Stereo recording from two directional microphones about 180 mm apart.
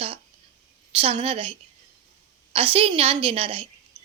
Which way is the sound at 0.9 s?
35° right (ahead or behind).